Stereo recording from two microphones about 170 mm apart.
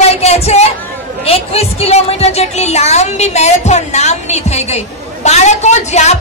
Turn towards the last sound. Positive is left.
turn(degrees=40)  # may be behind; listen again after turning